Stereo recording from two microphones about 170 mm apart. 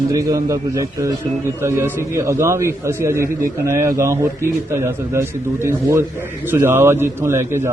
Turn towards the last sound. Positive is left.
turn(degrees=-15)  # may be behind; listen again after turning